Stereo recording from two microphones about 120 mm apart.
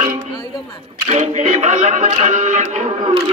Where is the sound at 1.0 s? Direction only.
75° right (ahead or behind); by 2.6 s 90° right.